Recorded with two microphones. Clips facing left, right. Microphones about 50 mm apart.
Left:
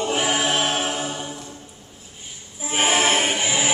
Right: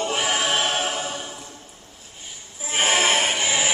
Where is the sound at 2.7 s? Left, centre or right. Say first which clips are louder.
Left 1 dB; centre.